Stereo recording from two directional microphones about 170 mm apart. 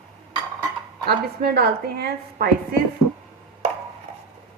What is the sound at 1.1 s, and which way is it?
A woman's voice, 70° right (ahead or behind).